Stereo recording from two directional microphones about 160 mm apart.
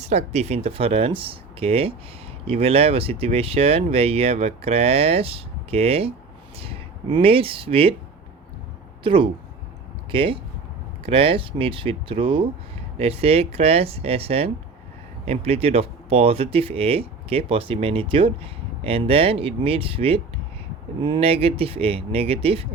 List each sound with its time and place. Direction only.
0.1 s speech: 45° right (ahead or behind)
9.0 s speech: 30° right (ahead or behind)